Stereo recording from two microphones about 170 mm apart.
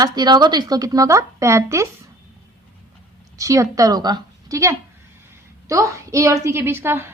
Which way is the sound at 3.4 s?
20° right (ahead or behind).